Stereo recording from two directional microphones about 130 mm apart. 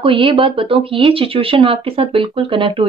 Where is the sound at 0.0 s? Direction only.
40° right (ahead or behind).